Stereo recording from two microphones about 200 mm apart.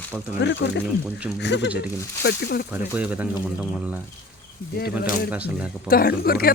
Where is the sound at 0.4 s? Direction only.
60° left (ahead or behind).